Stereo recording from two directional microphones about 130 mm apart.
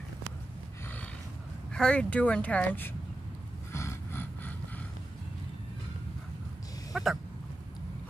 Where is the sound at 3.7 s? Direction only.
20° left (ahead or behind).